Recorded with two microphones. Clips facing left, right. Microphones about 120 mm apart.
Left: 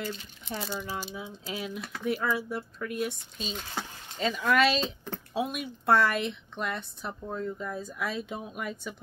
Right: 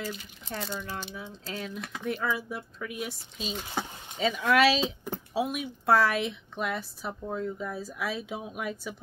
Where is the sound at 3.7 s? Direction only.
15° right (ahead or behind).